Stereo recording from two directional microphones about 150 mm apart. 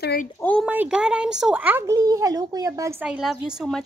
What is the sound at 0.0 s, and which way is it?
Speech, 90° left.